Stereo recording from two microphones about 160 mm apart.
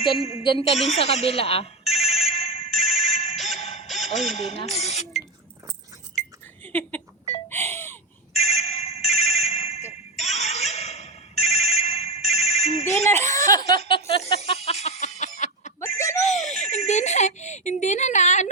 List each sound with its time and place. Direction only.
0.0 s speech: 35° left (ahead or behind)
2.0 s ringtone: 40° left (ahead or behind)
2.6 s fire alarm: centre (ahead or behind)
3.3 s music: centre (ahead or behind)
3.6 s music: 40° left (ahead or behind)
3.8 s music: centre (ahead or behind)
4.4 s speech: 40° left (ahead or behind)
7.5 s a sound: 15° left (ahead or behind)
8.3 s ringtone: 40° left (ahead or behind)
13.2 s laughter: 20° left (ahead or behind)
14.4 s music: 40° left (ahead or behind)
15.8 s a sound: 20° left (ahead or behind)
16.1 s a sound: 45° left (ahead or behind)